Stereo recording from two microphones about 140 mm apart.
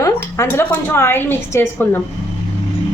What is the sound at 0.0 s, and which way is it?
A woman's voice, 20° left (ahead or behind).